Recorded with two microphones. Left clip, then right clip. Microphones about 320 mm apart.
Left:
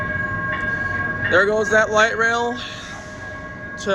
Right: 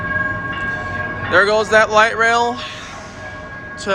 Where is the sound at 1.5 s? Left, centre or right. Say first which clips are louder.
Right 3 dB; centre.